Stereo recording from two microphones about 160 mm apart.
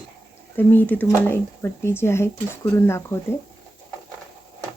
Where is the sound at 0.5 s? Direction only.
10° left (ahead or behind).